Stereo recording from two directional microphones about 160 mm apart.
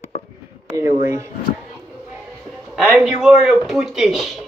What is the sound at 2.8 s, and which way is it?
Speech, 5° right (ahead or behind).